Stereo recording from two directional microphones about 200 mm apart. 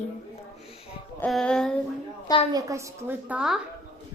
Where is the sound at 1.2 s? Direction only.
5° left (ahead or behind).